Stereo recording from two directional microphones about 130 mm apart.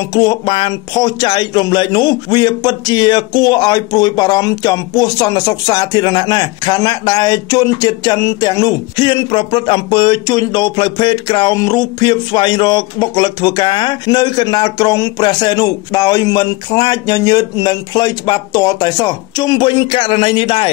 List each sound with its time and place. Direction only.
0.1 s speech: 30° left (ahead or behind)